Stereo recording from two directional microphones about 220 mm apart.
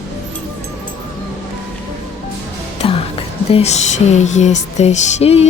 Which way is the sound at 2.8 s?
25° left (ahead or behind).